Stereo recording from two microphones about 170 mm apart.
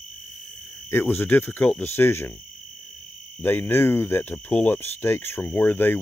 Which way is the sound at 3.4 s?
15° left (ahead or behind).